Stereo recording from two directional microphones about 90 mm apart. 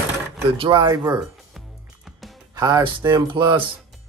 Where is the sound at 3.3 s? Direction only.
60° right (ahead or behind).